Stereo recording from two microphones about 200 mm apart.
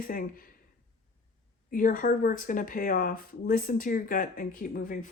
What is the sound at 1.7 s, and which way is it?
Speech, 40° left (ahead or behind).